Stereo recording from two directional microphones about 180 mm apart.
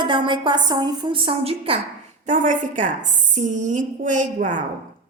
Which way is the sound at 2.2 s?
45° right (ahead or behind).